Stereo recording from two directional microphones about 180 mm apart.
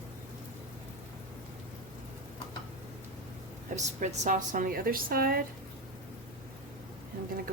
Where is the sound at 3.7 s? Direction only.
40° right (ahead or behind).